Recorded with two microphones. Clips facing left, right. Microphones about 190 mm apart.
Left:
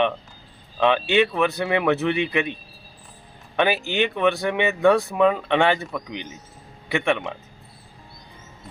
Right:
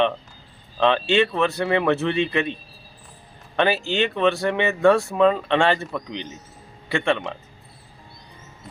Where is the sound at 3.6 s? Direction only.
15° left (ahead or behind).